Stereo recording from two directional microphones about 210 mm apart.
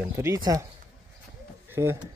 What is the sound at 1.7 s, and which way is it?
Speech, 10° right (ahead or behind).